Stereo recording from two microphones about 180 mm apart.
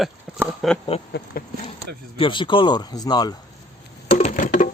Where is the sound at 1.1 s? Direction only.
65° left (ahead or behind).